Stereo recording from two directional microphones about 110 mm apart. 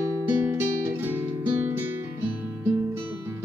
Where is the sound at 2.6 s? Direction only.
20° right (ahead or behind).